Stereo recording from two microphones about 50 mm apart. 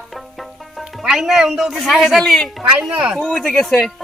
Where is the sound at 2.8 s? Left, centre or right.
Right.